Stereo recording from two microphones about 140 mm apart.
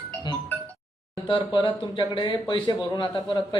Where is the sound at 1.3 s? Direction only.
35° left (ahead or behind).